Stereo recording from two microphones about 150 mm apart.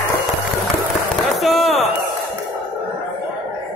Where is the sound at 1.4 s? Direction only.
Centre (ahead or behind).